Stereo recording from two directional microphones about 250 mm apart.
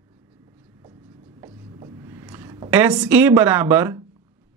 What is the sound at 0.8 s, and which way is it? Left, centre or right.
Writing, centre.